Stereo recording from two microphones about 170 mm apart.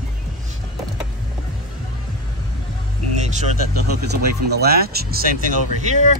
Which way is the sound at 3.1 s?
40° right (ahead or behind).